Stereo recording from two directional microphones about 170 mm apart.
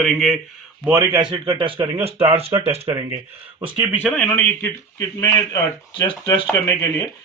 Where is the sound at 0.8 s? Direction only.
15° right (ahead or behind).